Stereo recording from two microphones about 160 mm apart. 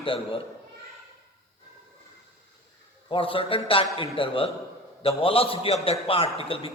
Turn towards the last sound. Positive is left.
turn(degrees=35)  # may be behind; listen again after turning